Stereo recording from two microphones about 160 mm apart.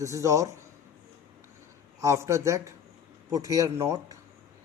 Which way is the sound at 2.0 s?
15° right (ahead or behind).